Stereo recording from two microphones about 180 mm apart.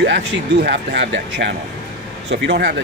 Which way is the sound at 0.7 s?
75° right (ahead or behind).